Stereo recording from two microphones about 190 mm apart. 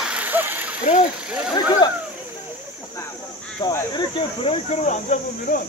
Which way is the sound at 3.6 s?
20° left (ahead or behind).